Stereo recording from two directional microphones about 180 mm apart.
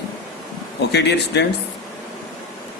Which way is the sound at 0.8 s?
70° left (ahead or behind).